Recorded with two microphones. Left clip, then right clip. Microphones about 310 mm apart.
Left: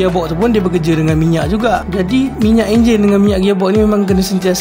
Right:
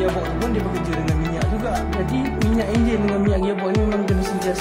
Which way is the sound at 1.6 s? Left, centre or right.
Left.